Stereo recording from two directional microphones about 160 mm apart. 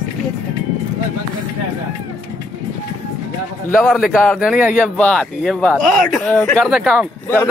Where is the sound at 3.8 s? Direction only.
Centre (ahead or behind).